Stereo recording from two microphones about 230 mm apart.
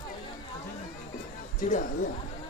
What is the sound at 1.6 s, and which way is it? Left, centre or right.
Speech, left.